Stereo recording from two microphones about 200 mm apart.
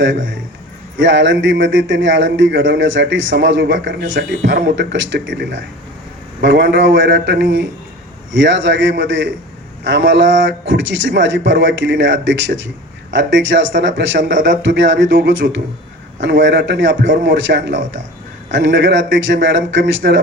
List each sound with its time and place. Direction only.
0.9 s speech: 65° right (ahead or behind)